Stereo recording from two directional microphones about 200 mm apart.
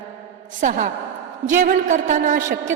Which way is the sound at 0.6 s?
40° right (ahead or behind).